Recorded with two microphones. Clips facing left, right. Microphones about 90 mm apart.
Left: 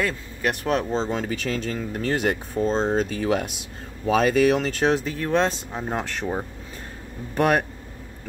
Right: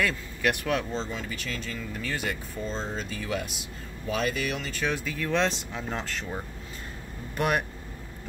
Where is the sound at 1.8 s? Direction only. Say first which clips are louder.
Left 9 dB; 55° left (ahead or behind).